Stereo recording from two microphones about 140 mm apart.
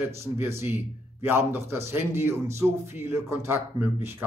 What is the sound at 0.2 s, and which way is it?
A man's voice, 20° right (ahead or behind).